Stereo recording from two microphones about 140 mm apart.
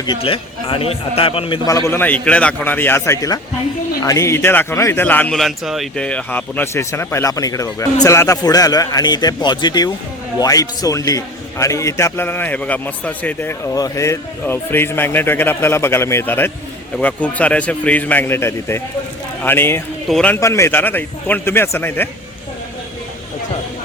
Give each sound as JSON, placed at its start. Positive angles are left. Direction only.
{"t": 0.2, "sound": "a man's voice", "side_deg": 40}
{"t": 1.6, "sound": "a man's voice", "side_deg": 25}
{"t": 5.4, "sound": "a man's voice", "side_deg": 0}
{"t": 20.1, "sound": "a man's voice", "side_deg": 5}
{"t": 20.3, "sound": "a man's voice", "side_deg": 20}